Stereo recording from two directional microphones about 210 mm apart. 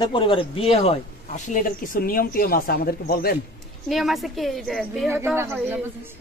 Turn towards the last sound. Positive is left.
turn(degrees=-10)  # may be behind; listen again after turning